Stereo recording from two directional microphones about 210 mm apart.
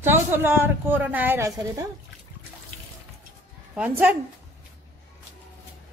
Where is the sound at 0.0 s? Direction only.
10° right (ahead or behind).